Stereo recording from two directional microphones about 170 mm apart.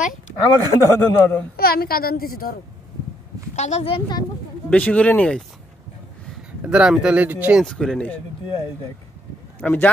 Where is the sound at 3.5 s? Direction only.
40° left (ahead or behind).